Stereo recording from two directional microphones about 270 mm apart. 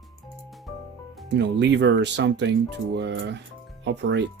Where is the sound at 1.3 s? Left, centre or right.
Right.